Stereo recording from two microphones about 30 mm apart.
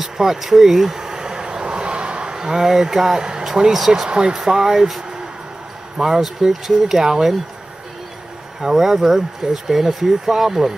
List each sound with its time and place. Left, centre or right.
0.0 s a sound: centre; by 2.3 s right
2.3 s speech: centre
4.3 s speech: centre
8.5 s speech: centre